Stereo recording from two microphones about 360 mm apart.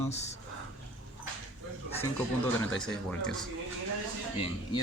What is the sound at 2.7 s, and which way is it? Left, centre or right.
Speech, centre.